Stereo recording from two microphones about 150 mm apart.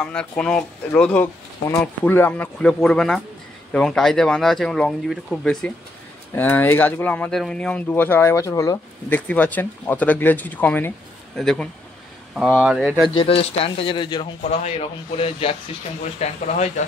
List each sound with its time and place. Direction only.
0.0 s speech: 5° left (ahead or behind)
13.1 s speech: 40° left (ahead or behind)
14.5 s speech: 40° left (ahead or behind)